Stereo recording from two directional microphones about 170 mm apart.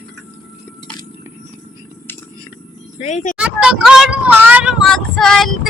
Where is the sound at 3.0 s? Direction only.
45° left (ahead or behind).